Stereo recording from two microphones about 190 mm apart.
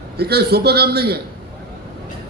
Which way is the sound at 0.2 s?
55° right (ahead or behind).